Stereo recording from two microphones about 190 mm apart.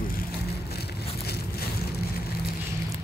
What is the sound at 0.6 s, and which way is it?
Vehicle, 55° left (ahead or behind).